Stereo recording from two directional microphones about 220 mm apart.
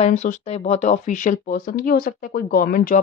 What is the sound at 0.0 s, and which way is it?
Speech, 35° left (ahead or behind).